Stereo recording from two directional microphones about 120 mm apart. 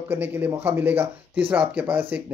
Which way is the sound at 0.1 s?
15° right (ahead or behind).